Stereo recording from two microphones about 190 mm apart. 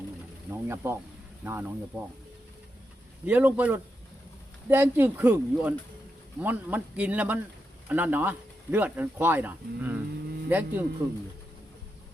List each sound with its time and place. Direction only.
0.5 s speech: 15° right (ahead or behind)
3.2 s speech: 10° right (ahead or behind)